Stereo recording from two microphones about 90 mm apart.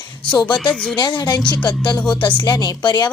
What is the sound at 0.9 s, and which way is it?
Speech, 55° left (ahead or behind).